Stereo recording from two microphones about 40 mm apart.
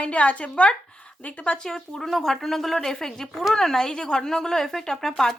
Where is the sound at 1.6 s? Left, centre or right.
Centre.